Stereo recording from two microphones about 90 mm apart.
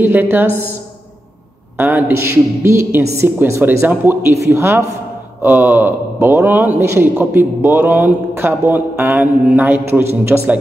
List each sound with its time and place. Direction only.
0.0 s a man's voice: 25° right (ahead or behind)
1.8 s a man's voice: 20° right (ahead or behind)